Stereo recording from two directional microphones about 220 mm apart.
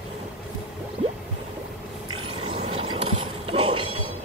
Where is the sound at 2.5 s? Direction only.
25° right (ahead or behind).